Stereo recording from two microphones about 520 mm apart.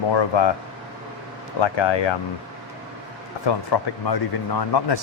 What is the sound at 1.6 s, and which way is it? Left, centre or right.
Speech, left.